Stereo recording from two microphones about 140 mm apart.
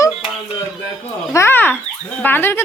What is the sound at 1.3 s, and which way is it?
Speech, 15° left (ahead or behind).